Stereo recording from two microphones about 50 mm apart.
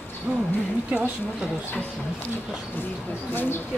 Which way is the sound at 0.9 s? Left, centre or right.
Right.